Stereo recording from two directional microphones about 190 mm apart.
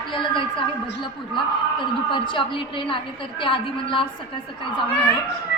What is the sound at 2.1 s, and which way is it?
A woman's voice, 25° left (ahead or behind).